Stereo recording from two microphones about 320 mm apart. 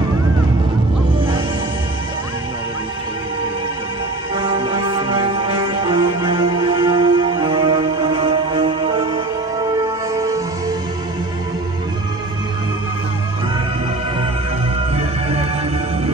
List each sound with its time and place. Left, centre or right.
4.4 s music: centre
15.0 s music: centre